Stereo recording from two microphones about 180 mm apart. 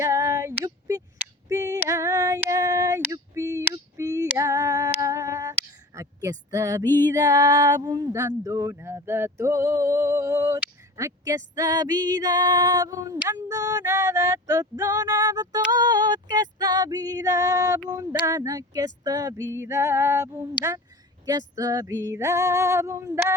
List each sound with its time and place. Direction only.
0.0 s female singing: 15° right (ahead or behind)
6.5 s a sound: 20° right (ahead or behind)
19.0 s female singing: 20° right (ahead or behind)